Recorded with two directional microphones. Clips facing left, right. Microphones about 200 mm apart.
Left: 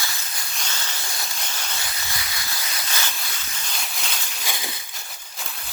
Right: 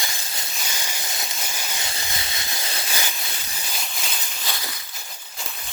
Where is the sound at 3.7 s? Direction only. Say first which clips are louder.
Even; centre (ahead or behind).